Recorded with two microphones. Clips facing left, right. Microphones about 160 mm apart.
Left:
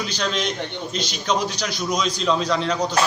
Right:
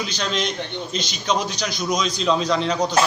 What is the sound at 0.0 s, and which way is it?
A man's voice, 5° left (ahead or behind).